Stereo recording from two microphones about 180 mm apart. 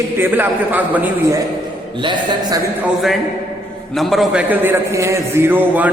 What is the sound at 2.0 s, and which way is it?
Speech, 25° right (ahead or behind).